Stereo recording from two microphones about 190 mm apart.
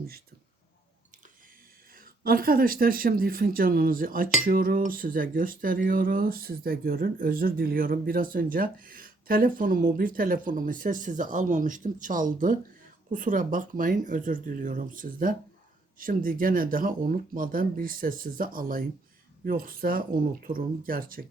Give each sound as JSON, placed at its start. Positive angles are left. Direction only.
{"t": 2.2, "sound": "speech", "side_deg": -50}